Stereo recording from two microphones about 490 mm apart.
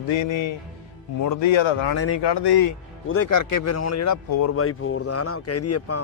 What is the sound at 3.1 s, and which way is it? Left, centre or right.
Speech, left.